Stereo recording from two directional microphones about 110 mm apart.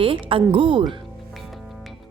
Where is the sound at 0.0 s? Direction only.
55° right (ahead or behind).